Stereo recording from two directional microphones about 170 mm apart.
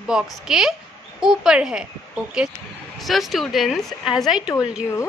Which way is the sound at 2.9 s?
Centre (ahead or behind).